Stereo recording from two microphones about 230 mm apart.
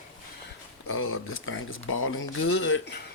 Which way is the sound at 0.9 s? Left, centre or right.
Left.